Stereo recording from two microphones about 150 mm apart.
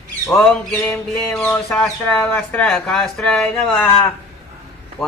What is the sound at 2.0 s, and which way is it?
Speech, 15° left (ahead or behind).